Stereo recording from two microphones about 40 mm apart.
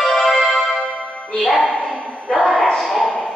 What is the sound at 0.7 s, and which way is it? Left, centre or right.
Music, left.